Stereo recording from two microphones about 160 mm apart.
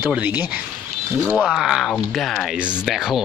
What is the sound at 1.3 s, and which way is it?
Speech, 5° left (ahead or behind).